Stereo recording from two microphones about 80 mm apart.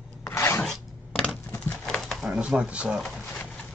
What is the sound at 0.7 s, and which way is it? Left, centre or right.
Rub, centre.